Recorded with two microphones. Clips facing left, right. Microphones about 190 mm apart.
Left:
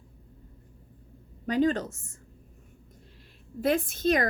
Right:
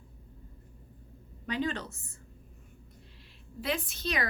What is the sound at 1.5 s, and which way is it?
Speech, 45° left (ahead or behind).